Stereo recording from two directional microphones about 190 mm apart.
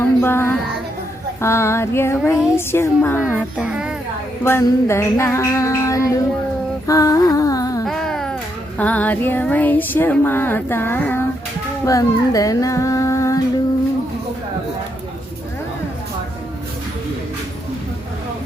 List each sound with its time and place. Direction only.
0.0 s child singing: 10° left (ahead or behind)
1.4 s female singing: 15° left (ahead or behind)
3.6 s a child's voice: 5° right (ahead or behind)
4.4 s female singing: 15° left (ahead or behind)
6.8 s music: 15° left (ahead or behind)
7.9 s music: 5° left (ahead or behind)
8.8 s female singing: 10° left (ahead or behind)
11.9 s speech: 20° left (ahead or behind)